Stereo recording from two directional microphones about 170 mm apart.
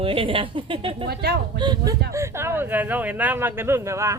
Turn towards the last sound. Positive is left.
turn(degrees=-15)  # may be behind; listen again after turning